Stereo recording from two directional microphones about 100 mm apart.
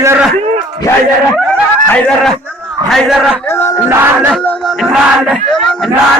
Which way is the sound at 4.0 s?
20° right (ahead or behind).